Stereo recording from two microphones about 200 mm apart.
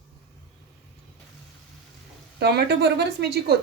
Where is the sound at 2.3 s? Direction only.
55° right (ahead or behind).